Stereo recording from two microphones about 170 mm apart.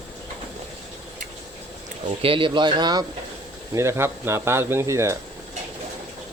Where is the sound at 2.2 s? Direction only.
30° right (ahead or behind).